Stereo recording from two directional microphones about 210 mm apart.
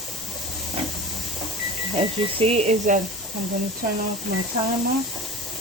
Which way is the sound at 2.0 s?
30° right (ahead or behind).